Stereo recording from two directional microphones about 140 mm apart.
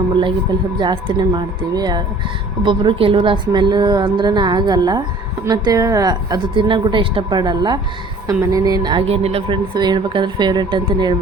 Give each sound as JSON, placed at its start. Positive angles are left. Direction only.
{"t": 0.8, "sound": "a woman's voice", "side_deg": -30}
{"t": 9.0, "sound": "speech", "side_deg": -45}
{"t": 9.7, "sound": "a woman's voice", "side_deg": -30}